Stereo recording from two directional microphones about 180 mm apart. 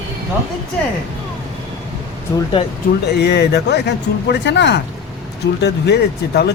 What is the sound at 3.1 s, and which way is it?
Speech, 65° left (ahead or behind).